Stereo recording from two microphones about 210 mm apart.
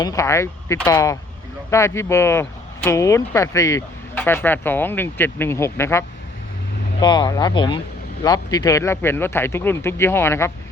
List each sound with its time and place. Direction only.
0.0 s speech: 15° left (ahead or behind)